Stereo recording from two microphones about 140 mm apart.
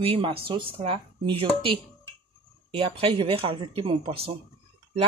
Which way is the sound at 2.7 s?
40° right (ahead or behind).